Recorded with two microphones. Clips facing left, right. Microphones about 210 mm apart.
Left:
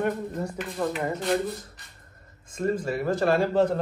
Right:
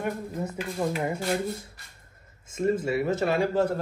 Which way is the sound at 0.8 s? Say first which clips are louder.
Even; 15° right (ahead or behind).